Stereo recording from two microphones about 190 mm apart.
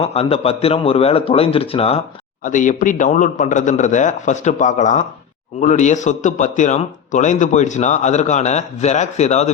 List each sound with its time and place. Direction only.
0.0 s a man's voice: 30° left (ahead or behind)
2.4 s a man's voice: 40° left (ahead or behind)